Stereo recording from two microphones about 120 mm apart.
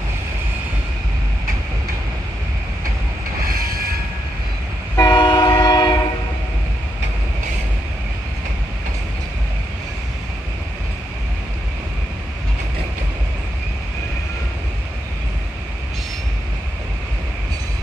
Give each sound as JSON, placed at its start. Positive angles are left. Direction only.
{"t": 4.9, "sound": "train", "side_deg": 30}